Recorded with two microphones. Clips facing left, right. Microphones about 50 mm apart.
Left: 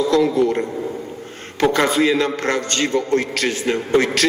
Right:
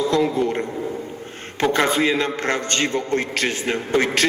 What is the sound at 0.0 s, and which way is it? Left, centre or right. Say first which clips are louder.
Speech: left 3 dB; right.